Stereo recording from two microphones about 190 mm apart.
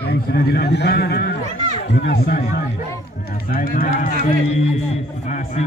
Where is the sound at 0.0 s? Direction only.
60° left (ahead or behind).